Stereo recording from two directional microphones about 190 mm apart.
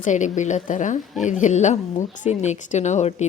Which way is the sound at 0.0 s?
40° left (ahead or behind).